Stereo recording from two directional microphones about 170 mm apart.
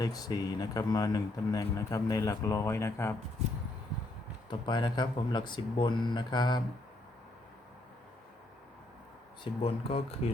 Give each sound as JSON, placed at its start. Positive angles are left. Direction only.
{"t": 0.0, "sound": "speech", "side_deg": 20}
{"t": 4.4, "sound": "speech", "side_deg": 25}
{"t": 9.4, "sound": "speech", "side_deg": 35}